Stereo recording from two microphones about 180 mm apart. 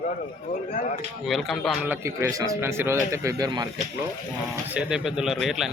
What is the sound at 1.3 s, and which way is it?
A man's voice, centre (ahead or behind).